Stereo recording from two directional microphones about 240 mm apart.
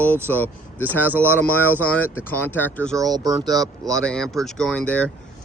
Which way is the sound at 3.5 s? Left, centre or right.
Centre.